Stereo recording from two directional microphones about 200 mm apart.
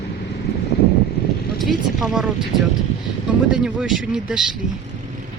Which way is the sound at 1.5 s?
Centre (ahead or behind).